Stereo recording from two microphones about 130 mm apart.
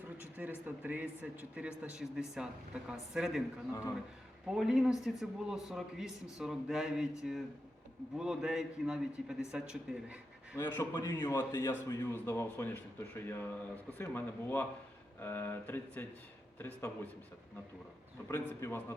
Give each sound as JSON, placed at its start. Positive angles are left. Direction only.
{"t": 0.2, "sound": "a sound", "side_deg": -15}
{"t": 0.6, "sound": "speech", "side_deg": -15}
{"t": 3.7, "sound": "a man's voice", "side_deg": 25}
{"t": 4.4, "sound": "a man's voice", "side_deg": 0}
{"t": 10.6, "sound": "a man's voice", "side_deg": 20}
{"t": 18.3, "sound": "a man's voice", "side_deg": 20}